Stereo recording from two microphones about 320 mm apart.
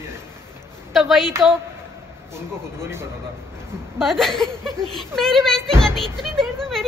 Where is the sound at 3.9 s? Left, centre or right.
Centre.